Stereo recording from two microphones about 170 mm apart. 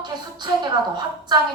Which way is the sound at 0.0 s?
25° right (ahead or behind).